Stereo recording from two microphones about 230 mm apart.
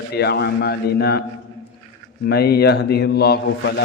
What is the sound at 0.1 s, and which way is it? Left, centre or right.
A man's voice, left.